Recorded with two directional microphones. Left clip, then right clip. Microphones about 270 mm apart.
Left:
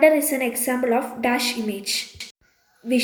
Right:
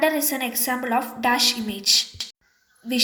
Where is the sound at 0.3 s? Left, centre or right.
Right.